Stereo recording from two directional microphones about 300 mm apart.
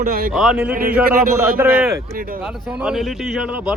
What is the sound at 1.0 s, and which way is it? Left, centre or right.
Speech, right.